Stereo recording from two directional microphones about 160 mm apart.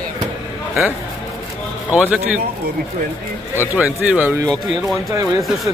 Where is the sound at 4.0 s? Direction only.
10° right (ahead or behind).